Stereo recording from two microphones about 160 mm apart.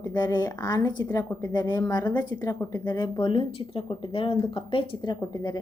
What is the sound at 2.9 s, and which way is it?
A woman's voice, 30° left (ahead or behind).